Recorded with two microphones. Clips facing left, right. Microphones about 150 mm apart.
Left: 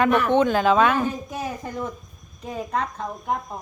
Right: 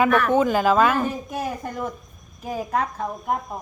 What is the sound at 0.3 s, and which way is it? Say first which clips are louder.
Speech: even; 5° right (ahead or behind).